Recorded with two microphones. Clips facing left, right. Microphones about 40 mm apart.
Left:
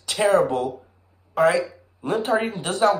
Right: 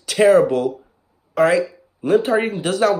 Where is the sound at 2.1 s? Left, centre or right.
Right.